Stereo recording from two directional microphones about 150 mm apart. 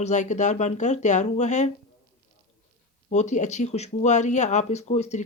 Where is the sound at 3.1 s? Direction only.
50° left (ahead or behind).